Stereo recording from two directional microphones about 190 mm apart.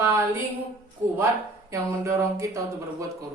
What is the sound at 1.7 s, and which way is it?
Speech, 15° right (ahead or behind).